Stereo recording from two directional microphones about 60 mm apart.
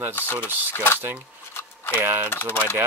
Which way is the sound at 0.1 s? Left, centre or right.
Left.